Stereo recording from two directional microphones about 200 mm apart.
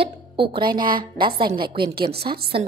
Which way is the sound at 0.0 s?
25° right (ahead or behind).